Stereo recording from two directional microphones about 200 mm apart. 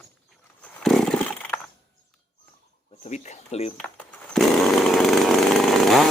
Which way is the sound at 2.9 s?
30° left (ahead or behind).